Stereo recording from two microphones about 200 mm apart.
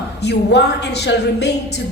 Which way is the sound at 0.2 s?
55° left (ahead or behind).